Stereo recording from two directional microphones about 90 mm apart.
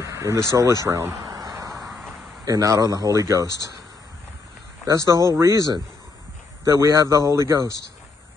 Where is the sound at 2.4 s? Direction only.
40° right (ahead or behind).